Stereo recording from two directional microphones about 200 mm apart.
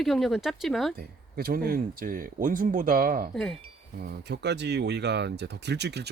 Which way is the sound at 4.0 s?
55° right (ahead or behind).